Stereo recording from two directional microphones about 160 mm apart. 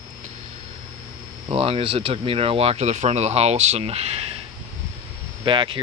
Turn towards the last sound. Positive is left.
turn(degrees=-30)  # may be behind; listen again after turning